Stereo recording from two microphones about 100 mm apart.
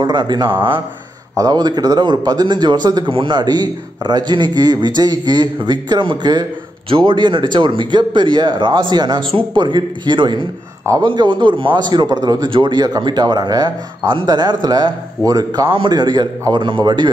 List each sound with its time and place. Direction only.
0.0 s speech: 50° right (ahead or behind)
1.3 s speech: 40° right (ahead or behind)
15.7 s speech: 50° right (ahead or behind)